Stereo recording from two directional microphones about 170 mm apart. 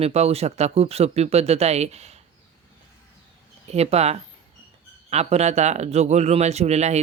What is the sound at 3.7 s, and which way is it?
Speech, 40° right (ahead or behind).